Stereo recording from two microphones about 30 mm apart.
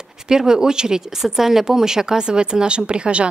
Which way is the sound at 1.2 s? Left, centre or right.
Centre.